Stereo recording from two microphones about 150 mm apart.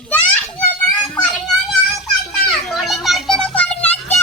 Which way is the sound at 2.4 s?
Centre (ahead or behind).